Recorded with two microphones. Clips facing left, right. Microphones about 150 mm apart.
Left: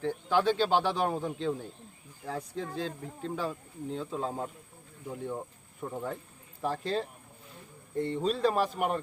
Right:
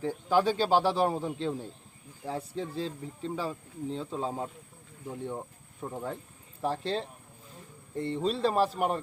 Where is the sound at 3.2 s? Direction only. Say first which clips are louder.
Even; centre (ahead or behind).